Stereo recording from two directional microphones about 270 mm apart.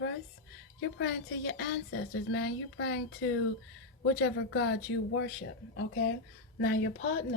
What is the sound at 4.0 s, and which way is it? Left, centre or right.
A woman's voice, left.